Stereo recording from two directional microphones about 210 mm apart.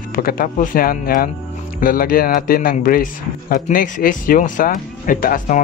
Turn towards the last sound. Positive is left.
turn(degrees=40)  # may be behind; listen again after turning